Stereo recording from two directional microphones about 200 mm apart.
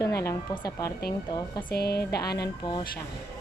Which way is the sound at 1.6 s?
50° left (ahead or behind).